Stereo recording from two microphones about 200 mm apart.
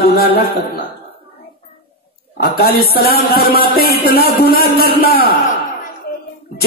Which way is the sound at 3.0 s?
50° left (ahead or behind).